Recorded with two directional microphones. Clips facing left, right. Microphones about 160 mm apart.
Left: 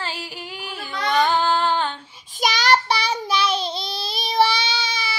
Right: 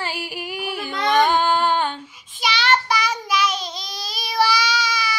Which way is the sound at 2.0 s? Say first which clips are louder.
Right 5 dB; 30° left (ahead or behind).